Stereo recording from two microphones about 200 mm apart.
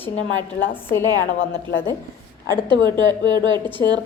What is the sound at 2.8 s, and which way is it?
A woman's voice, 20° right (ahead or behind).